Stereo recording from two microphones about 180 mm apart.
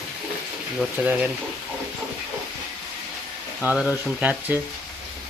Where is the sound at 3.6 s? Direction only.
5° right (ahead or behind).